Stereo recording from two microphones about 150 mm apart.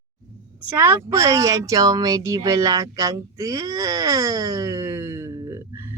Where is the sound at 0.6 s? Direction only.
15° right (ahead or behind).